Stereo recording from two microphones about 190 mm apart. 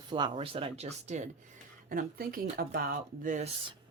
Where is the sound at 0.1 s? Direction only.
25° right (ahead or behind).